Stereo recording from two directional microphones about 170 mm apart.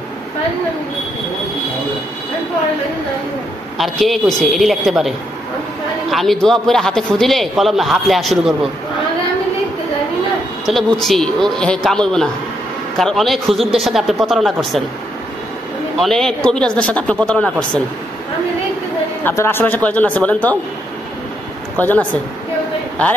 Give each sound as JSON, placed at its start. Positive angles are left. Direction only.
{"t": 3.7, "sound": "a man's voice", "side_deg": 0}
{"t": 6.1, "sound": "a man's voice", "side_deg": 5}
{"t": 10.6, "sound": "a man's voice", "side_deg": 0}
{"t": 16.0, "sound": "a man's voice", "side_deg": 0}
{"t": 19.2, "sound": "speech", "side_deg": 15}
{"t": 21.7, "sound": "speech", "side_deg": 10}